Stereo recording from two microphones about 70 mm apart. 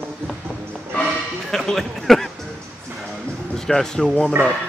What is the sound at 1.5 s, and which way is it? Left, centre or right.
Speech, centre.